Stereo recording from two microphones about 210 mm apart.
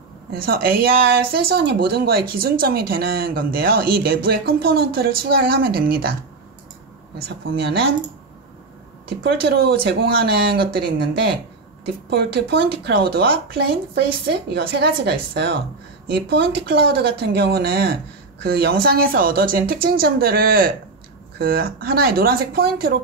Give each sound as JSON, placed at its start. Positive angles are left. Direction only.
{"t": 0.3, "sound": "speech", "side_deg": -45}
{"t": 7.2, "sound": "speech", "side_deg": -50}
{"t": 9.2, "sound": "speech", "side_deg": -50}